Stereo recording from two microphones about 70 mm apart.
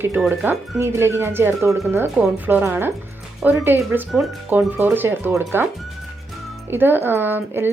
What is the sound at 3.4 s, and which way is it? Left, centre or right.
Speech, right.